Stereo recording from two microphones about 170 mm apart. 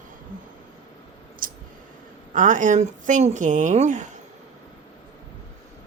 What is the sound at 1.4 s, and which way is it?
Clicking, 55° right (ahead or behind).